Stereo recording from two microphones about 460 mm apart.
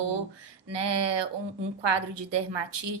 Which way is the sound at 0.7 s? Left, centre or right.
Right.